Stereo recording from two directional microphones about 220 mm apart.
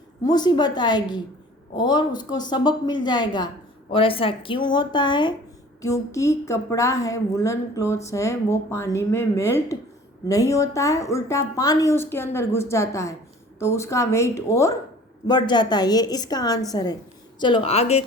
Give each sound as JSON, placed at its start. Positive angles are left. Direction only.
{"t": 0.3, "sound": "a woman's voice", "side_deg": 20}